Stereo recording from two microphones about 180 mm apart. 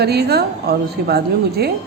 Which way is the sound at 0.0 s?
65° right (ahead or behind).